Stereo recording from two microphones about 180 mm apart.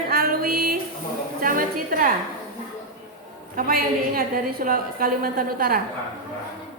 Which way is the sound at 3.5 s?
55° right (ahead or behind).